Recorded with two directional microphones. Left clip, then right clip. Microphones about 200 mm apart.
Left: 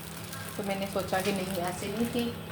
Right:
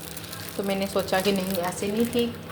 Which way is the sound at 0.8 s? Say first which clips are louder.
Right 6 dB; 40° right (ahead or behind).